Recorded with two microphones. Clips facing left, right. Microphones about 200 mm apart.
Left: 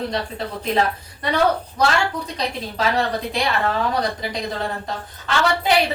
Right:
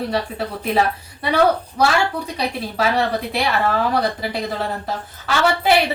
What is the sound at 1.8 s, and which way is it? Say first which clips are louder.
A woman's voice: right 2 dB; 10° right (ahead or behind).